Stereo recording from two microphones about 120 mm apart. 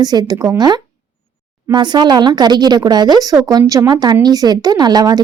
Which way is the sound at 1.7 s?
40° right (ahead or behind).